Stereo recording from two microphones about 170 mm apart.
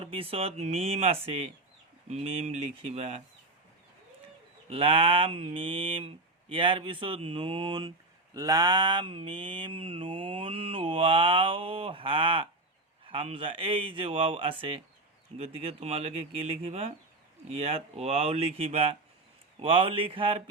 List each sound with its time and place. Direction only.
0.0 s speech: 35° right (ahead or behind)
4.7 s speech: 30° right (ahead or behind)